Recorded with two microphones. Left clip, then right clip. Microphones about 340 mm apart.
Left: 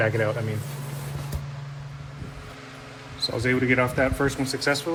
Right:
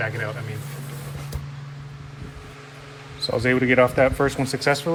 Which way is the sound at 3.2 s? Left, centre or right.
Right.